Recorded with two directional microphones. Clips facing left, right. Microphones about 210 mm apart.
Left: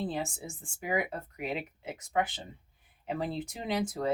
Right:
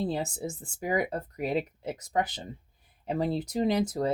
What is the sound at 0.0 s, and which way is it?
Speech, 40° right (ahead or behind).